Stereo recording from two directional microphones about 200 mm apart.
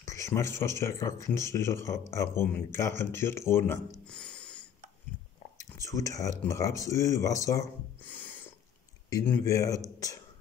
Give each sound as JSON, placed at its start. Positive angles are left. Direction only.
{"t": 0.0, "sound": "speech", "side_deg": 15}
{"t": 5.6, "sound": "speech", "side_deg": 15}